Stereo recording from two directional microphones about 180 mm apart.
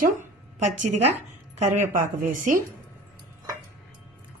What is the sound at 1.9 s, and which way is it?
Speech, 45° right (ahead or behind).